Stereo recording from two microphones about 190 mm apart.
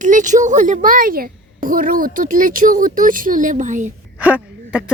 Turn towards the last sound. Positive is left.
turn(degrees=-5)  # may be behind; listen again after turning